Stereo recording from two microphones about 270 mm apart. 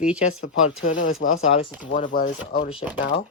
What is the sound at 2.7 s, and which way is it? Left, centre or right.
Speech, left.